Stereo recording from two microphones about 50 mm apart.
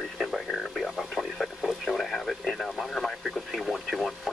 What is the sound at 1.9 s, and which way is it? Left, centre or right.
Radio, centre.